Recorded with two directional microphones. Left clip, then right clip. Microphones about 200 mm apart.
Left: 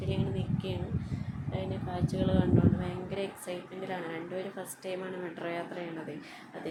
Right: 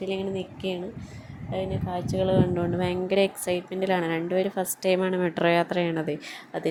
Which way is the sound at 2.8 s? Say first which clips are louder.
Right 13 dB; 40° right (ahead or behind).